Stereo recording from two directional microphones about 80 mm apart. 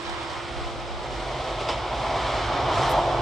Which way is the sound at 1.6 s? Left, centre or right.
Centre.